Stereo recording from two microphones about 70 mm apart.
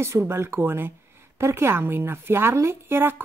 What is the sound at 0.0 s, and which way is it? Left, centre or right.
A woman's voice, right.